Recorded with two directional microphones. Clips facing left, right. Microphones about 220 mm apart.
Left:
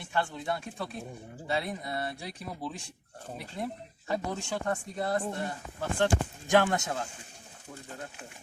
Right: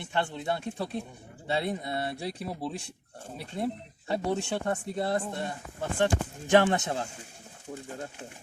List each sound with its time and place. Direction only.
0.0 s speech: 25° right (ahead or behind)
6.8 s speech: 30° right (ahead or behind)